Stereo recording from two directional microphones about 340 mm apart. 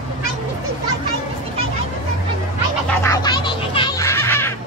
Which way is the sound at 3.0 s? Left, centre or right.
Centre.